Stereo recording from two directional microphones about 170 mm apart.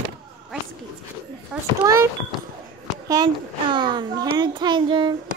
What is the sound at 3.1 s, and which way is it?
A child's voice, 25° right (ahead or behind).